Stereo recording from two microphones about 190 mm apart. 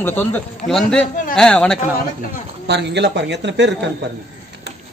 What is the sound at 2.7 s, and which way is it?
Speech, 65° right (ahead or behind).